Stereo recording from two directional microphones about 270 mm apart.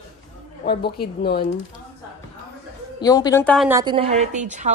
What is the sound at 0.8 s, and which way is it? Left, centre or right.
Speech, left.